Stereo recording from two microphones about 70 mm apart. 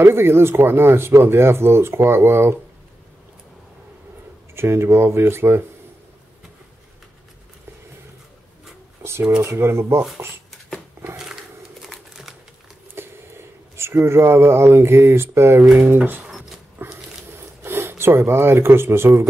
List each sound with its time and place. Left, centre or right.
0.0 s speech: right
4.6 s speech: right
9.0 s speech: right
11.8 s typing: centre
13.0 s a sound: right
13.7 s speech: right
16.0 s speech: right
16.8 s a sound: right
17.6 s speech: right